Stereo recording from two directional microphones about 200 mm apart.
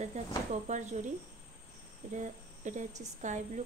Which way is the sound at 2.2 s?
35° right (ahead or behind).